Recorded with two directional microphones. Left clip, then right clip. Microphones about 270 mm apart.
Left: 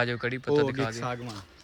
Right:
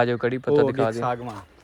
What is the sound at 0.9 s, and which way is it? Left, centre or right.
Speech, centre.